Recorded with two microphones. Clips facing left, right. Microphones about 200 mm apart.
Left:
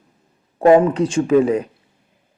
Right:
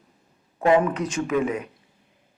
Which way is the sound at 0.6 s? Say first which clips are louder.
Left 7 dB; 35° left (ahead or behind).